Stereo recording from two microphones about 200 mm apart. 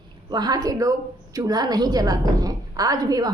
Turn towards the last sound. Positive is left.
turn(degrees=-20)  # may be behind; listen again after turning